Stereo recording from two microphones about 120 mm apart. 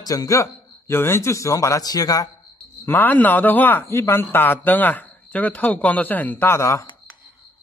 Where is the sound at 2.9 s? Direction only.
15° left (ahead or behind).